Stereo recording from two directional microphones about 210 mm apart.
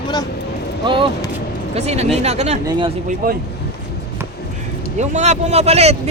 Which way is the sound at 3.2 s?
40° right (ahead or behind).